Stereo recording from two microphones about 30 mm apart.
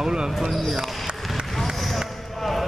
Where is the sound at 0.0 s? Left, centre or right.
Right.